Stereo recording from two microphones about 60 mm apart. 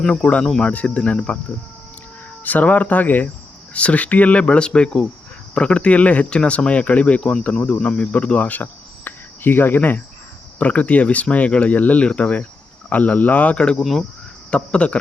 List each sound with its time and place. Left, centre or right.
0.0 s speech: centre
0.4 s speech: centre
0.7 s speech: left
7.2 s speech: centre
7.4 s cricket: left
10.6 s speech: left